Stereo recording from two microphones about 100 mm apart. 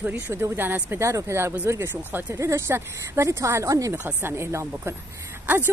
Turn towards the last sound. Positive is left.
turn(degrees=-20)  # may be behind; listen again after turning